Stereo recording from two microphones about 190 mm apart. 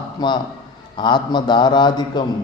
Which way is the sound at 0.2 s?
20° left (ahead or behind).